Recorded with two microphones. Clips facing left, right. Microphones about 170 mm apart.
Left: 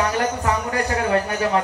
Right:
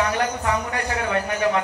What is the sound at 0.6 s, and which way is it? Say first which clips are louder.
Speech: left 4 dB; 35° left (ahead or behind).